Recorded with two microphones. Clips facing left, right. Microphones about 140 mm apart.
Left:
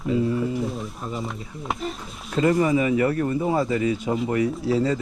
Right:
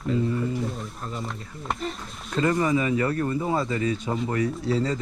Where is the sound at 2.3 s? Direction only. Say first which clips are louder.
Left 3 dB; 30° left (ahead or behind).